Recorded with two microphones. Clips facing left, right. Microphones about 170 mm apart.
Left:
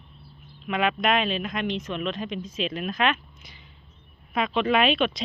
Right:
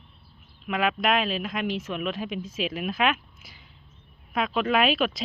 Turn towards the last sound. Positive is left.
turn(degrees=-5)  # may be behind; listen again after turning